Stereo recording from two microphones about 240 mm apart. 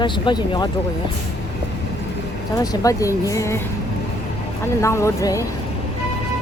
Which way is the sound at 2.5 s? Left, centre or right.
Centre.